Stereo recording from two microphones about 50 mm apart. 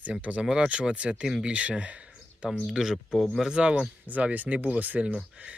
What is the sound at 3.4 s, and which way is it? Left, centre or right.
Speech, centre.